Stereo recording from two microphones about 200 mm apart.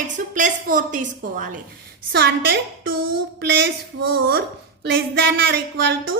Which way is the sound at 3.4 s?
60° right (ahead or behind).